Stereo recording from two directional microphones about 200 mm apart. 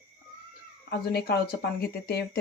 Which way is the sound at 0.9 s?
50° left (ahead or behind).